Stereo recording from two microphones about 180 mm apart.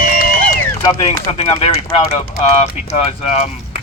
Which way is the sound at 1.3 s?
35° left (ahead or behind).